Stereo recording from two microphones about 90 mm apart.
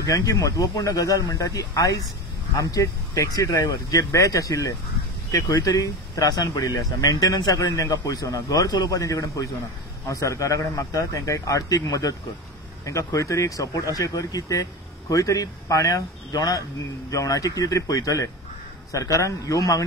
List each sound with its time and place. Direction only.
0.0 s speech: 40° left (ahead or behind)